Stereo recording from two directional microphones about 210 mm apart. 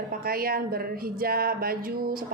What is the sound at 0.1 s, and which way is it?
A woman's voice, 45° right (ahead or behind).